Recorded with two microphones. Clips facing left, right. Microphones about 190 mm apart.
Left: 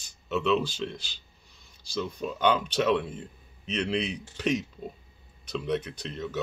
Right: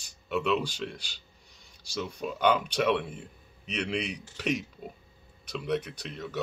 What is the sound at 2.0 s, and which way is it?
Speech, 10° right (ahead or behind).